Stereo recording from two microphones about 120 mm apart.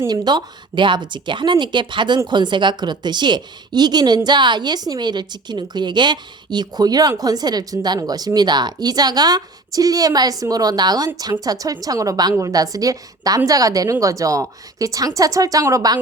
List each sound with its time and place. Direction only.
0.1 s a woman's voice: 40° right (ahead or behind)